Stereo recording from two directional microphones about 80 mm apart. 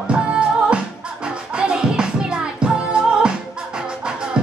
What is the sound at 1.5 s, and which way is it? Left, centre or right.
Music, centre.